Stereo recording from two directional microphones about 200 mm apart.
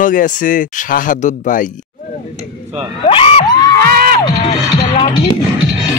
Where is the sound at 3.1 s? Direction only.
25° left (ahead or behind).